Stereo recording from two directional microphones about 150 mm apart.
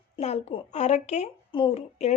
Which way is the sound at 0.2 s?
45° left (ahead or behind).